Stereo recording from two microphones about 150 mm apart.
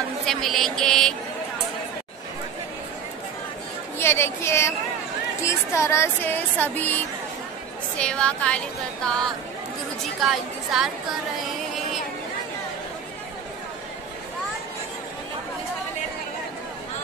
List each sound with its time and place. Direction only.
0.3 s speech: centre (ahead or behind)
4.0 s speech: 15° left (ahead or behind)
8.0 s speech: 5° left (ahead or behind)
10.2 s speech: 5° right (ahead or behind)